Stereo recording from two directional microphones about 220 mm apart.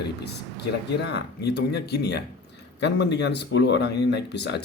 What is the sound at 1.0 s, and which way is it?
Speech, 50° left (ahead or behind).